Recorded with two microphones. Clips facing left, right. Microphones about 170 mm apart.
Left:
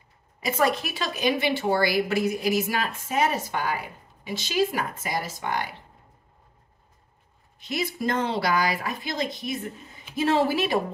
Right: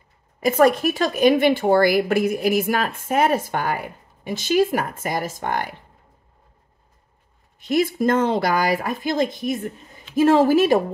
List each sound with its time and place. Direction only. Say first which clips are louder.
0.4 s speech: right 8 dB; 50° right (ahead or behind)
7.6 s speech: right 9 dB; 50° right (ahead or behind)